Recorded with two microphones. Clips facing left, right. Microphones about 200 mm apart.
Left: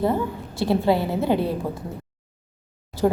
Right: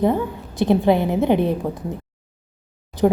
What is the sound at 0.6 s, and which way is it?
A woman's voice, 20° right (ahead or behind).